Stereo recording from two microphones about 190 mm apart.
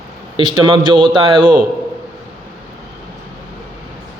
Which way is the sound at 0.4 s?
25° right (ahead or behind).